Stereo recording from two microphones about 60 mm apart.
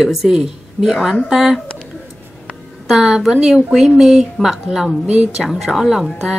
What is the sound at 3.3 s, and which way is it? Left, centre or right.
A woman's voice, centre.